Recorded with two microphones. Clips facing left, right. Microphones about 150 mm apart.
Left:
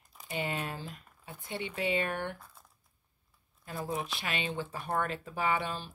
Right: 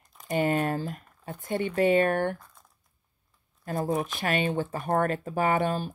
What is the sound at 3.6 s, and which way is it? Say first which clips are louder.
Speech: right 8 dB; 50° right (ahead or behind).